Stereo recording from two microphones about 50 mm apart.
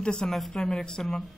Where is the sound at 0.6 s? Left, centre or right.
Centre.